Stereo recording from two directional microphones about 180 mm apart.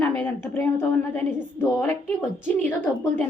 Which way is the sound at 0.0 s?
15° left (ahead or behind).